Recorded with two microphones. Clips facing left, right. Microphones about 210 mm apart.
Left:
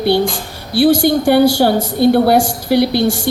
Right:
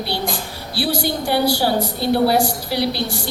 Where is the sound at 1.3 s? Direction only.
50° left (ahead or behind).